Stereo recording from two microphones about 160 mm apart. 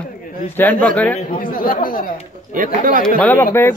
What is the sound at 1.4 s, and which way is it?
Speech, 60° left (ahead or behind).